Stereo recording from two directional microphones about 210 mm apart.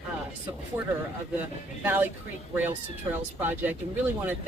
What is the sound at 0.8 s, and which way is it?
Speech, 10° right (ahead or behind).